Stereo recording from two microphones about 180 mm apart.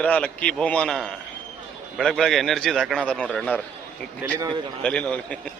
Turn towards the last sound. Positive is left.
turn(degrees=5)  # may be behind; listen again after turning